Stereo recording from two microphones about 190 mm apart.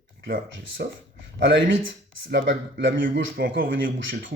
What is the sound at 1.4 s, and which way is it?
Speech, 70° right (ahead or behind).